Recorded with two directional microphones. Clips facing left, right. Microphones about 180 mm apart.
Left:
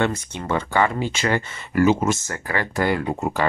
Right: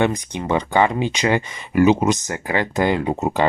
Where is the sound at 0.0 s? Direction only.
15° right (ahead or behind).